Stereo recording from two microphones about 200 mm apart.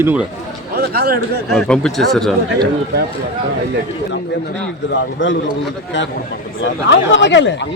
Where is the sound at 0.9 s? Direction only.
50° right (ahead or behind).